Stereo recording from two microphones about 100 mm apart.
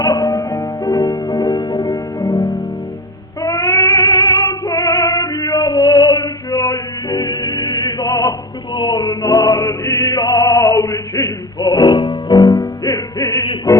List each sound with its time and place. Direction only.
0.0 s music: 40° left (ahead or behind)
3.4 s a sound: 30° left (ahead or behind)
4.1 s music: 55° left (ahead or behind)
4.6 s female singing: 35° left (ahead or behind)